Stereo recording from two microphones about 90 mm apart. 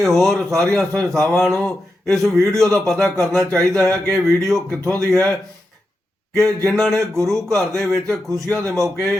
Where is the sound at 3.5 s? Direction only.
35° right (ahead or behind).